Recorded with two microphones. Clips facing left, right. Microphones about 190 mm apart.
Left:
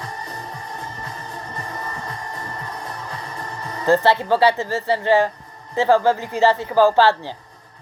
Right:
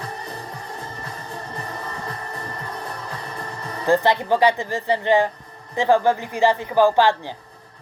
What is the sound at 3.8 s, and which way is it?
Speech, 15° right (ahead or behind).